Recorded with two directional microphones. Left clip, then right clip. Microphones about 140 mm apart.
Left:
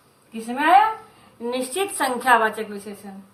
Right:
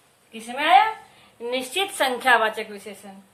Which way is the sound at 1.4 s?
30° right (ahead or behind).